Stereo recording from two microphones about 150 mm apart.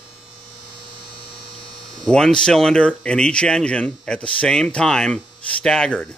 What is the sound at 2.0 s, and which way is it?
Speech, 5° left (ahead or behind).